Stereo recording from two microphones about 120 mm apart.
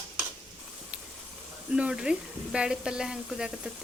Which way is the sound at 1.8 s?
5° right (ahead or behind).